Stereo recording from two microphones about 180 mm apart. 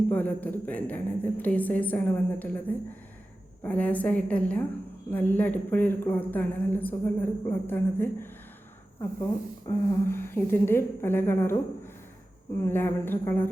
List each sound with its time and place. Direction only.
0.1 s a woman's voice: 10° left (ahead or behind)
12.6 s a woman's voice: 10° left (ahead or behind)